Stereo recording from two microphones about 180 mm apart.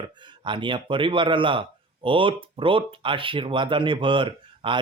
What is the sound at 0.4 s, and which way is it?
Speech, 25° right (ahead or behind).